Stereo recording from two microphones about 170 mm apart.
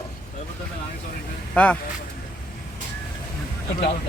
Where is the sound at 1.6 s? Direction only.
10° left (ahead or behind).